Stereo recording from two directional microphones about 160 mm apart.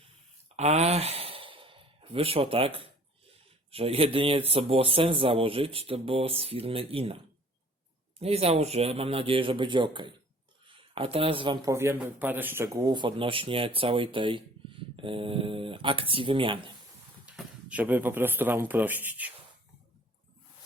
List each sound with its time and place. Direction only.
0.5 s sigh: 45° right (ahead or behind)
3.7 s speech: 35° right (ahead or behind)
8.2 s speech: 40° right (ahead or behind)
11.6 s speech: 15° right (ahead or behind)
17.2 s speech: 10° right (ahead or behind)